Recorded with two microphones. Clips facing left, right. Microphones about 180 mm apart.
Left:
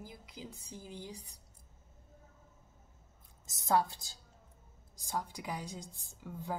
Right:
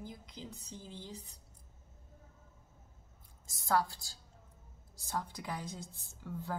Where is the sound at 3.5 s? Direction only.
20° left (ahead or behind).